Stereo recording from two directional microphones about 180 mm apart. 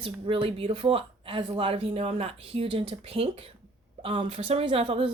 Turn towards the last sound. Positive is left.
turn(degrees=-35)  # may be behind; listen again after turning